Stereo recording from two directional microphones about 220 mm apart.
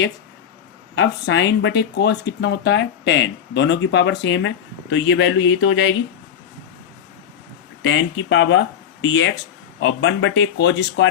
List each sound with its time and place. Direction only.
0.9 s speech: 55° left (ahead or behind)
7.8 s speech: 60° left (ahead or behind)